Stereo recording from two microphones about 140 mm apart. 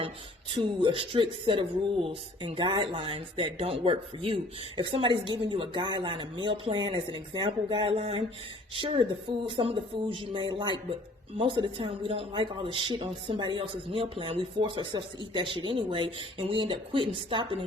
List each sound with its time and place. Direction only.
0.5 s a man's voice: 35° right (ahead or behind)